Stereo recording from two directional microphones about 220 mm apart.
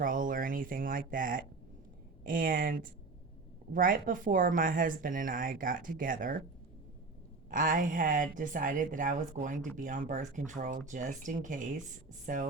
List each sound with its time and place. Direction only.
0.0 s speech: 35° right (ahead or behind)
7.5 s speech: 40° right (ahead or behind)